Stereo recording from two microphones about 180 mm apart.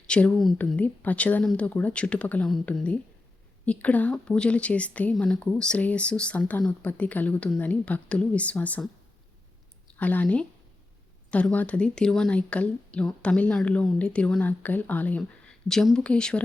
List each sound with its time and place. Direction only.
0.1 s a woman's voice: 5° left (ahead or behind)
10.0 s a woman's voice: 10° left (ahead or behind)